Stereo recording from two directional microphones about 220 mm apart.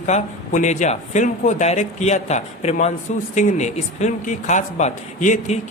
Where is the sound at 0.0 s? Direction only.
35° left (ahead or behind).